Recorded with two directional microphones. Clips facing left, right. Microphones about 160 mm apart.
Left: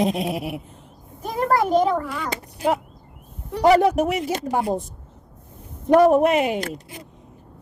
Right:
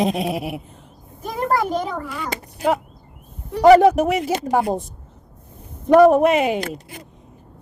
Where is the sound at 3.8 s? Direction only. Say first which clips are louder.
Right 4 dB; 90° right.